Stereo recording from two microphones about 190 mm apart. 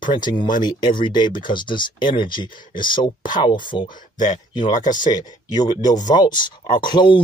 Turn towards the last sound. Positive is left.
turn(degrees=25)  # may be behind; listen again after turning